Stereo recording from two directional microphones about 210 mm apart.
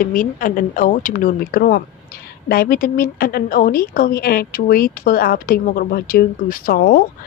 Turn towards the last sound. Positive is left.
turn(degrees=45)  # may be behind; listen again after turning